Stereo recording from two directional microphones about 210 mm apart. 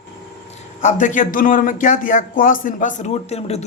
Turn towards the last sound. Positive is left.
turn(degrees=30)  # may be behind; listen again after turning